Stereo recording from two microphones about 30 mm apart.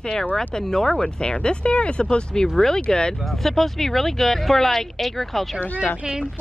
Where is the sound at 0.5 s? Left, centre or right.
Centre.